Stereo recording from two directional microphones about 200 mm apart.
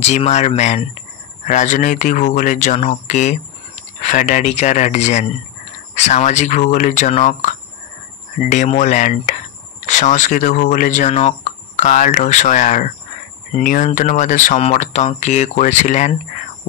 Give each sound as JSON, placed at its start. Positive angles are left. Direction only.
{"t": 0.0, "sound": "speech", "side_deg": 35}